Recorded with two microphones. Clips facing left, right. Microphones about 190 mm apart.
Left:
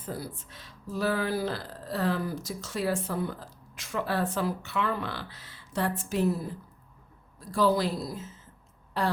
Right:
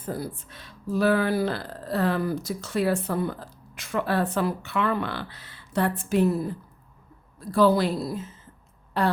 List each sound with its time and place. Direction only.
0.0 s speech: 50° right (ahead or behind)
7.3 s speech: 65° right (ahead or behind)